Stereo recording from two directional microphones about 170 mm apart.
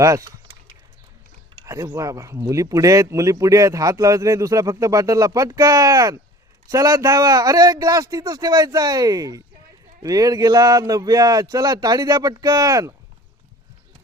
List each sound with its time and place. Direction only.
0.0 s speech: 20° right (ahead or behind)
1.6 s speech: 20° right (ahead or behind)